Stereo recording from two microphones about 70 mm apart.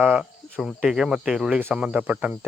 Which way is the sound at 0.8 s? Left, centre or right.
Centre.